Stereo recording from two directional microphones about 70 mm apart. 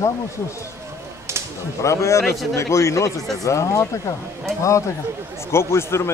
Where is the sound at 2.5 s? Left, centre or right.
Left.